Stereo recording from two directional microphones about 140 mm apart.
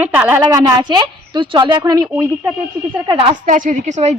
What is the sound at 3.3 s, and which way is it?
Speech, 65° right (ahead or behind).